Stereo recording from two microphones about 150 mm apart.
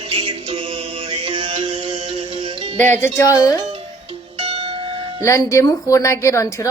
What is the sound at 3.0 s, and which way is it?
Speech, 20° left (ahead or behind).